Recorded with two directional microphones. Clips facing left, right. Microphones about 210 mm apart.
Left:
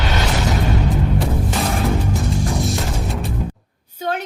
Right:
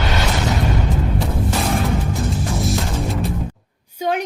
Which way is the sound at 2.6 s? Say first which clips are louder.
Right 1 dB; centre (ahead or behind).